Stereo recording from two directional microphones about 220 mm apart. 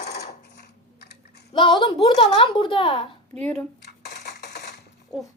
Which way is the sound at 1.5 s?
20° left (ahead or behind).